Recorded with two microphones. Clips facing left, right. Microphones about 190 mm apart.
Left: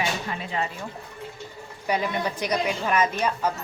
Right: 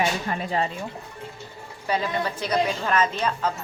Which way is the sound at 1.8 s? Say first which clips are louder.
Even; 15° left (ahead or behind).